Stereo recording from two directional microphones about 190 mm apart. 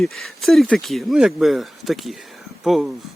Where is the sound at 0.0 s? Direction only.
Centre (ahead or behind).